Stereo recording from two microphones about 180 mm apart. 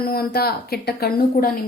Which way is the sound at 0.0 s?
55° left (ahead or behind).